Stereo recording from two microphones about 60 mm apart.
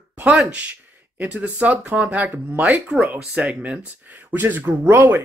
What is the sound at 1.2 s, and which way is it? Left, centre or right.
Speech, right.